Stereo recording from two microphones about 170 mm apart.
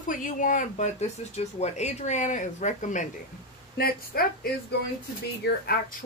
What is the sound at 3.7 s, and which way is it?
Speech, 65° left (ahead or behind).